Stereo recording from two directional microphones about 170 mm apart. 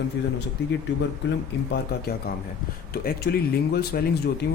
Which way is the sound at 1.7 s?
70° left (ahead or behind).